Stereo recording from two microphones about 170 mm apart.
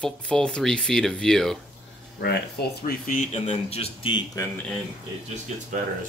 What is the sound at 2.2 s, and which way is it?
Speech, 70° left (ahead or behind).